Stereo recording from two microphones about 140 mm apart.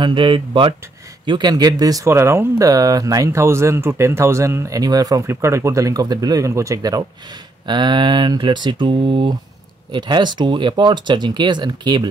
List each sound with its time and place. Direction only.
0.0 s speech: 35° right (ahead or behind)